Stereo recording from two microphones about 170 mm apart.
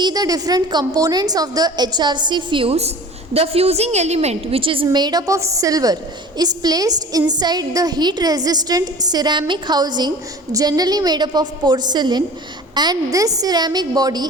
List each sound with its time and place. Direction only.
0.0 s a woman's voice: 20° right (ahead or behind)